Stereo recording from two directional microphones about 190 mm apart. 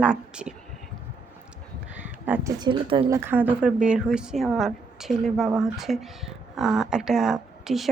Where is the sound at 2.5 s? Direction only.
25° right (ahead or behind).